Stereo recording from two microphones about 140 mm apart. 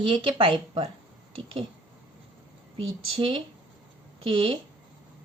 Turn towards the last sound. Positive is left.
turn(degrees=-40)  # may be behind; listen again after turning